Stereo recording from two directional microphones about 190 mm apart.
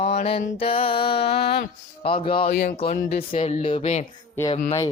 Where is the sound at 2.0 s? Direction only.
30° left (ahead or behind).